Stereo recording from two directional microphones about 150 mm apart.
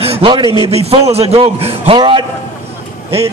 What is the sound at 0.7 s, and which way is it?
Speech, 45° right (ahead or behind).